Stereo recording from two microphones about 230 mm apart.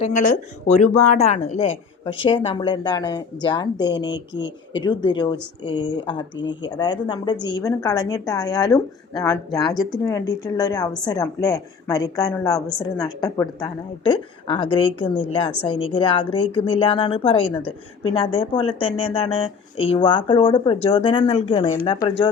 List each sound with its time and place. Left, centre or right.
0.0 s a woman's voice: left
4.1 s speech: left
4.7 s speech: centre
6.4 s speech: left
6.7 s a woman's voice: centre